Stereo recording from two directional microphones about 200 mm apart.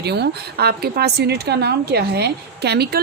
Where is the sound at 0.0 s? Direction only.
55° right (ahead or behind).